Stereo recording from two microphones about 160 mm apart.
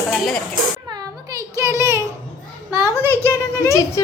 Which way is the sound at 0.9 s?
20° right (ahead or behind).